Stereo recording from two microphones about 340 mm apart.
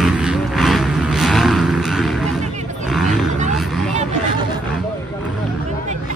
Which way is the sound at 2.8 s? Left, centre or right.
Centre.